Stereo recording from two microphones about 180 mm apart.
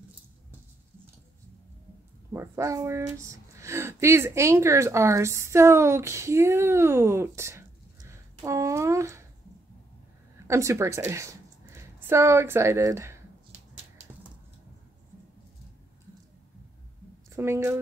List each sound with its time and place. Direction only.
2.3 s a woman's voice: 15° right (ahead or behind)
10.4 s a woman's voice: 15° right (ahead or behind)
17.4 s speech: 15° right (ahead or behind)